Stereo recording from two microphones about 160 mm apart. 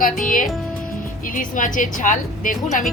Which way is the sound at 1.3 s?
55° left (ahead or behind).